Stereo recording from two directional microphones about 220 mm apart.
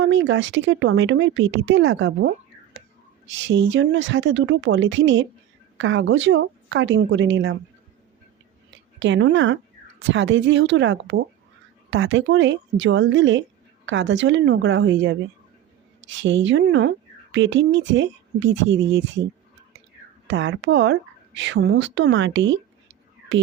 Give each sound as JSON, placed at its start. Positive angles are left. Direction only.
{"t": 0.0, "sound": "speech", "side_deg": -55}
{"t": 3.3, "sound": "speech", "side_deg": -60}
{"t": 8.7, "sound": "speech", "side_deg": -55}
{"t": 20.2, "sound": "speech", "side_deg": -60}
{"t": 23.3, "sound": "music", "side_deg": -55}